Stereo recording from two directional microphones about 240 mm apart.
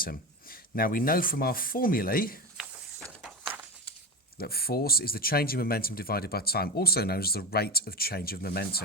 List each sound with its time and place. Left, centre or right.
0.0 s speech: left
2.6 s a sound: centre
4.4 s speech: left